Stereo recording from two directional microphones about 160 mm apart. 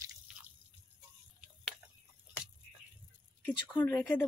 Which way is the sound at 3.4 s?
10° left (ahead or behind).